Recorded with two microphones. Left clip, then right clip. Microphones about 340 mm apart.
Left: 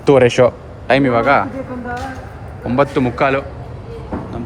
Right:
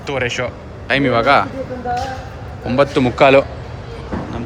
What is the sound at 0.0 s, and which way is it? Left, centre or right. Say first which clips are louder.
Speech: left 10 dB; centre.